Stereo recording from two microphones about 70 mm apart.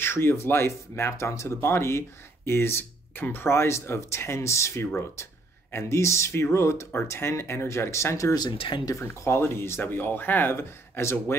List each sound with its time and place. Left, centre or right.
0.0 s speech: left
8.4 s speech: left
9.0 s speech: left